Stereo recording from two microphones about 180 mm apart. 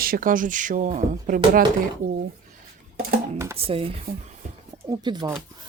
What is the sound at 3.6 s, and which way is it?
Stir, 30° right (ahead or behind).